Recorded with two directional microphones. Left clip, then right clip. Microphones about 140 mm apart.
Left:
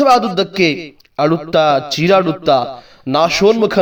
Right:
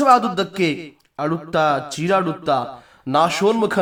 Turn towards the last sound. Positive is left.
turn(degrees=35)  # may be behind; listen again after turning